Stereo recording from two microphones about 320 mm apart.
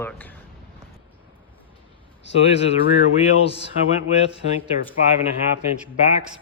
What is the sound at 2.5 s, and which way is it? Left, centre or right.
Speech, centre.